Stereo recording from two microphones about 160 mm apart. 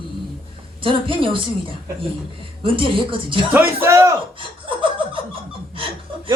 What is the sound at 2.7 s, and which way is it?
Speech, 35° right (ahead or behind).